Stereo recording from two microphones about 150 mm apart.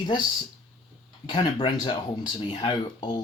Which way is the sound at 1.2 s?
30° left (ahead or behind).